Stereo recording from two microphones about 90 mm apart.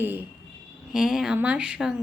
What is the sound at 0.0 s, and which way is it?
Speech, 20° right (ahead or behind).